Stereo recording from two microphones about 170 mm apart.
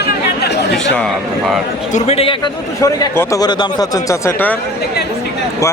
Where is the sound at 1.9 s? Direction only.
40° left (ahead or behind).